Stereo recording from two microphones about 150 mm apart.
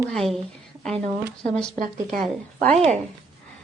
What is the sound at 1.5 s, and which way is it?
Speech, 5° left (ahead or behind).